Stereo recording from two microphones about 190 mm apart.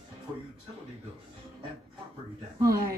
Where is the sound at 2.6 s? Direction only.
15° right (ahead or behind).